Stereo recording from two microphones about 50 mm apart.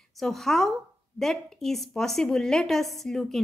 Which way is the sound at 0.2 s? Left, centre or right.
Centre.